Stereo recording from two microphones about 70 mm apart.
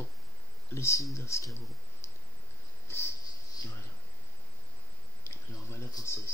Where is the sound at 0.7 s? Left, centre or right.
Left.